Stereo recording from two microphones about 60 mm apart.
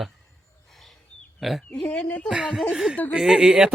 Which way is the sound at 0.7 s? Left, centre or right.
Centre.